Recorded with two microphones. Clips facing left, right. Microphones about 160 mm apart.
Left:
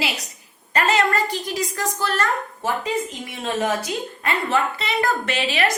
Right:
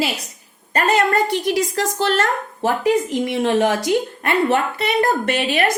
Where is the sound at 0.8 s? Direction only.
60° right (ahead or behind).